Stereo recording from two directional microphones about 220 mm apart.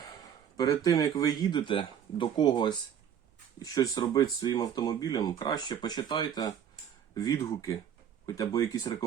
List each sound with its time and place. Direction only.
0.5 s speech: 20° left (ahead or behind)